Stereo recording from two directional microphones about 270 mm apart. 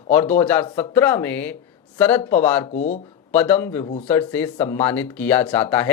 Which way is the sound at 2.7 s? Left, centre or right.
Left.